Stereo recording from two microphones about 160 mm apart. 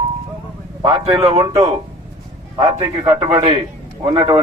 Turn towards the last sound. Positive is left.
turn(degrees=-25)  # may be behind; listen again after turning